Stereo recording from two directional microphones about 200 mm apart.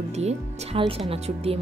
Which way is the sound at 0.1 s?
35° right (ahead or behind).